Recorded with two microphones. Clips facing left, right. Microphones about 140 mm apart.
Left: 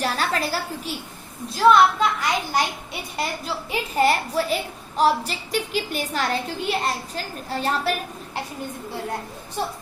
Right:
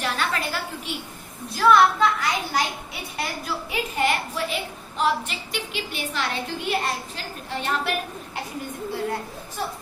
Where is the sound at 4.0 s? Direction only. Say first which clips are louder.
Left 5 dB; 35° left (ahead or behind).